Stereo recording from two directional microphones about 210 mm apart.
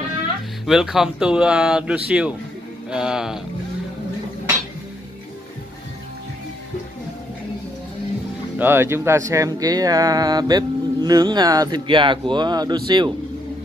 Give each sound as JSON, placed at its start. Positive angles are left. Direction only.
{"t": 0.7, "sound": "speech", "side_deg": 0}
{"t": 8.5, "sound": "speech", "side_deg": -10}